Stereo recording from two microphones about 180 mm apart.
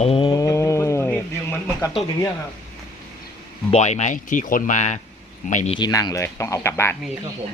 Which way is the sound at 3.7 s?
40° left (ahead or behind).